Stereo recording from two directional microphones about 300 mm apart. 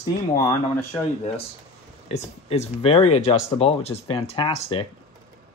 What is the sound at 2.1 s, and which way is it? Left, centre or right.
Speech, centre.